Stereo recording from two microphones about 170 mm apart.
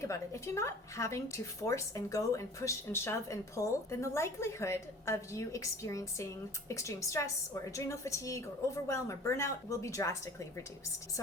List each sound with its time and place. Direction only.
0.0 s speech: 15° left (ahead or behind)